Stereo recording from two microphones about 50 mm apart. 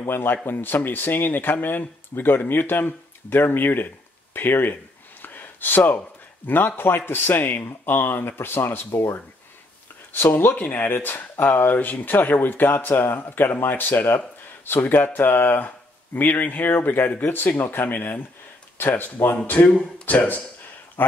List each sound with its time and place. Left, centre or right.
0.1 s speech: left
5.2 s a sound: left
5.9 s speech: left
10.1 s speech: left